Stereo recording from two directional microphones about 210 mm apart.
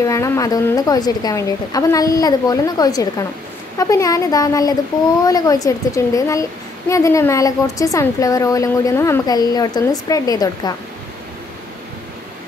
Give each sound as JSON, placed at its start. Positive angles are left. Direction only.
{"t": 0.0, "sound": "a woman's voice", "side_deg": 15}